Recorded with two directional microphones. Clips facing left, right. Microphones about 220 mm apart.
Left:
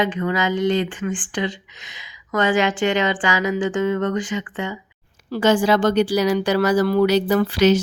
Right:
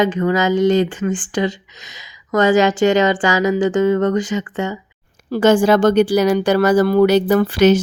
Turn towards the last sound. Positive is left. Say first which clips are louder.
# right 4 dB
turn(degrees=-50)  # may be behind; listen again after turning